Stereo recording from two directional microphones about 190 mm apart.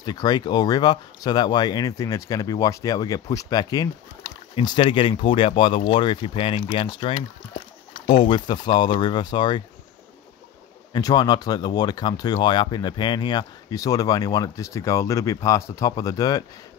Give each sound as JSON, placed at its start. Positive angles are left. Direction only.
{"t": 0.0, "sound": "speech", "side_deg": 20}
{"t": 10.9, "sound": "speech", "side_deg": 20}